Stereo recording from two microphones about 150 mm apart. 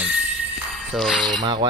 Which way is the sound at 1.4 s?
30° right (ahead or behind).